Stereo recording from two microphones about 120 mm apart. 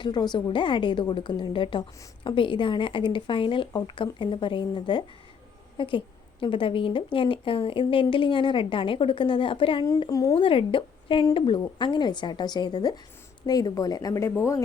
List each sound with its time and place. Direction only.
0.0 s a woman's voice: 35° left (ahead or behind)
10.1 s speech: 30° left (ahead or behind)
10.3 s a woman's voice: 45° left (ahead or behind); by 14.6 s 20° left (ahead or behind)